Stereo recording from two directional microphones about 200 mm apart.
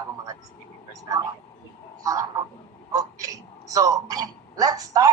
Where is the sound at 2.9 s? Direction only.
15° right (ahead or behind).